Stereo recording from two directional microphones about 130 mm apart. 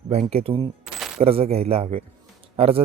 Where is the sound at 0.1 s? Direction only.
50° right (ahead or behind).